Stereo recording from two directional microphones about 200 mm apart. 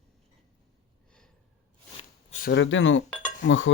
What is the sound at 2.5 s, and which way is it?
Speech, 65° left (ahead or behind).